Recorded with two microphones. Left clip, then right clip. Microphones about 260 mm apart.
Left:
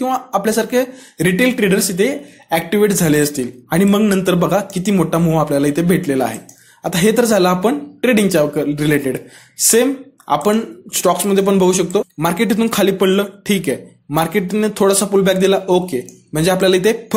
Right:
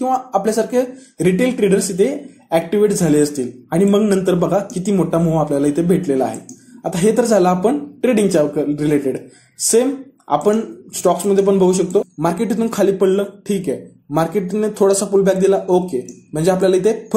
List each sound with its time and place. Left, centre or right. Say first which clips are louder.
0.3 s speech: left 1 dB; left